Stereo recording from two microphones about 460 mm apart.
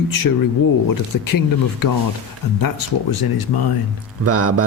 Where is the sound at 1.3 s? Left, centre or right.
Left.